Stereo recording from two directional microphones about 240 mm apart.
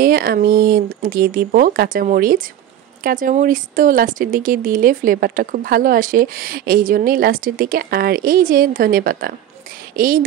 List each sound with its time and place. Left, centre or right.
0.0 s speech: right